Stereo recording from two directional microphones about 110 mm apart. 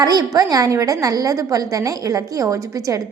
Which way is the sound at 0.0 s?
35° right (ahead or behind).